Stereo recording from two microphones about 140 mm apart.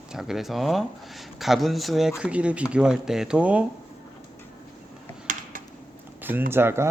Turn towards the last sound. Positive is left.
turn(degrees=-15)  # may be behind; listen again after turning